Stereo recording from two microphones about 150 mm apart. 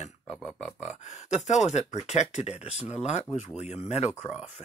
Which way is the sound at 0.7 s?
50° left (ahead or behind).